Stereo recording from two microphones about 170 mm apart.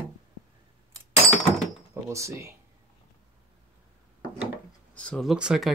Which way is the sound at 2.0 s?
15° right (ahead or behind).